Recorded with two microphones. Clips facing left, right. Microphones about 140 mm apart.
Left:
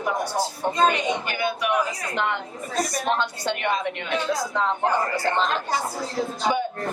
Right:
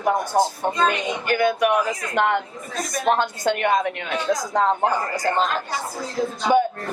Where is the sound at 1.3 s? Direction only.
50° right (ahead or behind).